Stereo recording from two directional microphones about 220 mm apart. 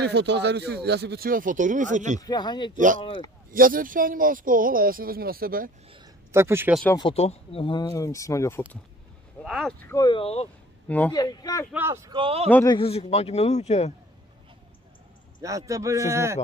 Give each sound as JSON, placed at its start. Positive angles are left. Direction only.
{"t": 0.0, "sound": "speech", "side_deg": -50}
{"t": 2.2, "sound": "speech", "side_deg": 20}
{"t": 2.7, "sound": "speech", "side_deg": -35}
{"t": 6.3, "sound": "a man's voice", "side_deg": -10}
{"t": 7.0, "sound": "speech", "side_deg": 25}
{"t": 9.4, "sound": "speech", "side_deg": 0}
{"t": 10.9, "sound": "speech", "side_deg": 5}
{"t": 11.7, "sound": "a man's voice", "side_deg": -10}
{"t": 12.4, "sound": "speech", "side_deg": 10}
{"t": 12.7, "sound": "speech", "side_deg": 25}
{"t": 15.4, "sound": "a man's voice", "side_deg": -15}